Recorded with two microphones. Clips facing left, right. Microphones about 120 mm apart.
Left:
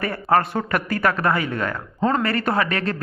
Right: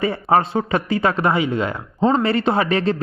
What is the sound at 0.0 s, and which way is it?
A man's voice, 20° right (ahead or behind).